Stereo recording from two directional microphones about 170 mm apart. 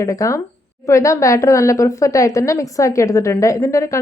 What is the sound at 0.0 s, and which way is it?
Speech, 20° left (ahead or behind).